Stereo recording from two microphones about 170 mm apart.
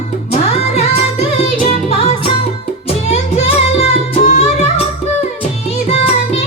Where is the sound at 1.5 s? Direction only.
35° left (ahead or behind).